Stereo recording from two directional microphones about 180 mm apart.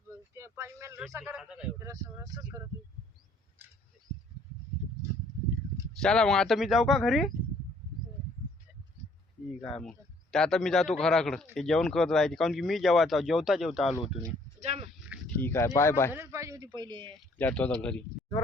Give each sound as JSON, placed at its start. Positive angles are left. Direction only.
{"t": 0.3, "sound": "a sound", "side_deg": -15}
{"t": 1.1, "sound": "a man's voice", "side_deg": -10}
{"t": 1.8, "sound": "speech", "side_deg": -20}
{"t": 6.0, "sound": "speech", "side_deg": 5}
{"t": 9.6, "sound": "speech", "side_deg": 5}
{"t": 14.6, "sound": "sheep", "side_deg": -40}
{"t": 15.4, "sound": "speech", "side_deg": 10}
{"t": 16.1, "sound": "a sound", "side_deg": -15}
{"t": 17.3, "sound": "speech", "side_deg": 10}